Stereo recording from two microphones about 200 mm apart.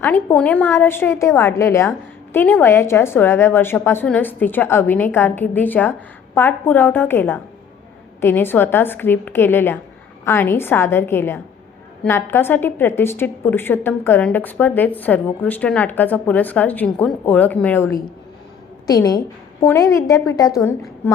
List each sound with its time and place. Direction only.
0.0 s a woman's voice: 10° left (ahead or behind)